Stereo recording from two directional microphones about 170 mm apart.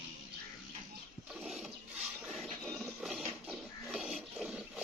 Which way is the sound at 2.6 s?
Centre (ahead or behind).